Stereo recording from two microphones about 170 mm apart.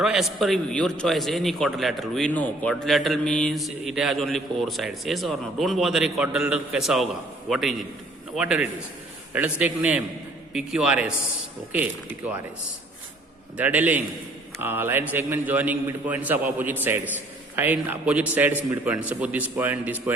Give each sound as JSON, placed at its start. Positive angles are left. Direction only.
{"t": 0.0, "sound": "a man's voice", "side_deg": 0}
{"t": 13.6, "sound": "a man's voice", "side_deg": -10}